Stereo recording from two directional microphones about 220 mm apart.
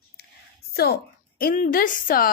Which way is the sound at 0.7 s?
45° left (ahead or behind).